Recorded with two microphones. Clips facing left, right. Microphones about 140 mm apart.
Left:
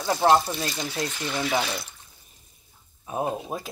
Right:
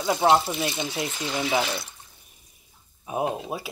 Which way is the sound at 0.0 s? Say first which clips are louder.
Even; 15° right (ahead or behind).